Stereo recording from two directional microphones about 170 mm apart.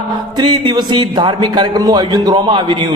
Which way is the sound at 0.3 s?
25° right (ahead or behind).